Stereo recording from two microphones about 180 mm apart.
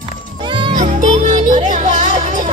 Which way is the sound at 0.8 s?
45° right (ahead or behind).